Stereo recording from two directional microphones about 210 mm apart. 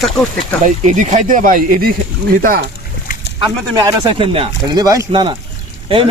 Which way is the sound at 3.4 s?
20° right (ahead or behind).